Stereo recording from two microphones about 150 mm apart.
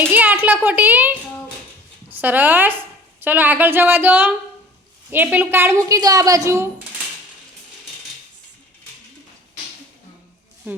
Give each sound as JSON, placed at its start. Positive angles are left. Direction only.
{"t": 0.0, "sound": "a woman's voice", "side_deg": -10}